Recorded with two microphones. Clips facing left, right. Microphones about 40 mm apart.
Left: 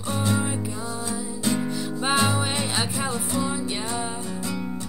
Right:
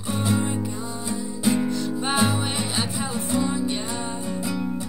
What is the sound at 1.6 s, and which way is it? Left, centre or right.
Music, centre.